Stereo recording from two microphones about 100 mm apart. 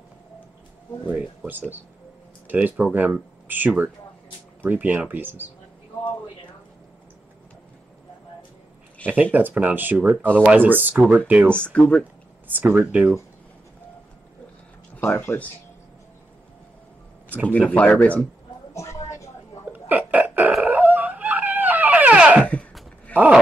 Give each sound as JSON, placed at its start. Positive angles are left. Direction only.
{"t": 1.0, "sound": "speech", "side_deg": -15}
{"t": 9.0, "sound": "speech", "side_deg": -15}
{"t": 11.5, "sound": "speech", "side_deg": 10}
{"t": 12.4, "sound": "speech", "side_deg": -20}
{"t": 15.0, "sound": "speech", "side_deg": 20}
{"t": 17.5, "sound": "speech", "side_deg": 15}
{"t": 18.7, "sound": "a sound", "side_deg": 30}
{"t": 19.7, "sound": "burping", "side_deg": -15}
{"t": 20.6, "sound": "dog", "side_deg": -15}
{"t": 22.4, "sound": "a sound", "side_deg": 10}